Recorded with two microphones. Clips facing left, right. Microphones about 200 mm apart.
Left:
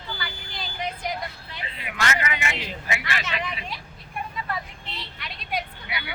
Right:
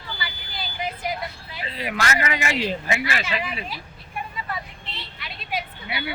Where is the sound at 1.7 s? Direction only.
35° right (ahead or behind).